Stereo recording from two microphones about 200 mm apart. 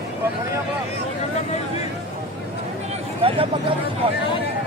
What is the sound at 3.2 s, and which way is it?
Speech, 25° right (ahead or behind).